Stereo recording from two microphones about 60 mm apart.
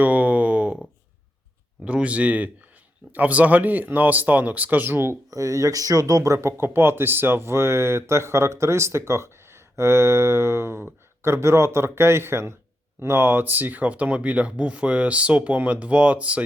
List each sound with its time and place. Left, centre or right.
0.0 s a sound: right
1.8 s speech: right
5.3 s speech: right